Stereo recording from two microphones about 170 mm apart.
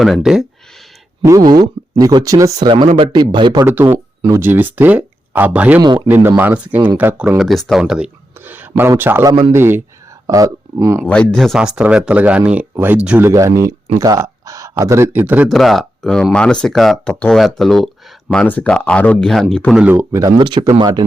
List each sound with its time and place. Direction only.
0.0 s speech: centre (ahead or behind)
1.5 s speech: 20° right (ahead or behind)
4.3 s speech: 15° right (ahead or behind)
11.0 s speech: 5° left (ahead or behind); by 15.4 s 10° right (ahead or behind)
15.4 s speech: centre (ahead or behind)
19.7 s speech: 10° right (ahead or behind)